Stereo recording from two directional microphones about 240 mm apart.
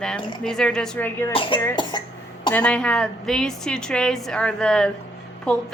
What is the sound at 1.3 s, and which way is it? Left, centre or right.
Speech, left.